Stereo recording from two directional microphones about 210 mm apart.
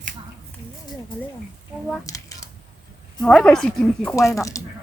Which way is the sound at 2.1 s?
15° left (ahead or behind).